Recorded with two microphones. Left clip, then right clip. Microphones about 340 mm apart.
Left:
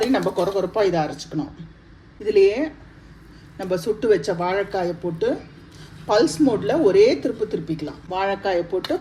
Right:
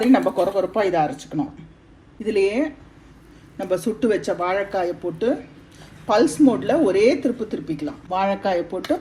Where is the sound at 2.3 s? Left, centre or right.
Centre.